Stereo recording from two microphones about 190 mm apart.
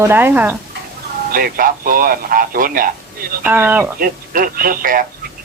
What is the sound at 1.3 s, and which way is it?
A man's voice, 50° right (ahead or behind).